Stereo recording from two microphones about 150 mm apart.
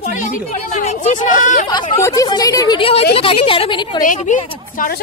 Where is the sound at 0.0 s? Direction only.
55° left (ahead or behind).